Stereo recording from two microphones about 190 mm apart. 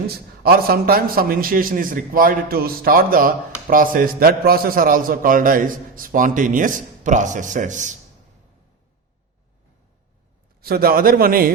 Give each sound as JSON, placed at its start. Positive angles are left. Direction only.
{"t": 0.4, "sound": "a man's voice", "side_deg": -50}
{"t": 10.6, "sound": "a man's voice", "side_deg": -55}